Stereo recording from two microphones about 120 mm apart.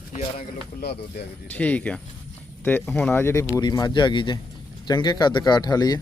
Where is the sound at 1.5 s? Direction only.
15° left (ahead or behind); by 6.0 s 35° left (ahead or behind).